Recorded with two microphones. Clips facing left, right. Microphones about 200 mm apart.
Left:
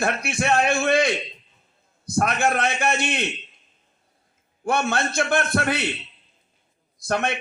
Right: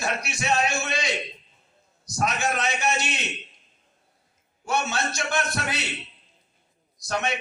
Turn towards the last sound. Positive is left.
turn(degrees=55)  # may be behind; listen again after turning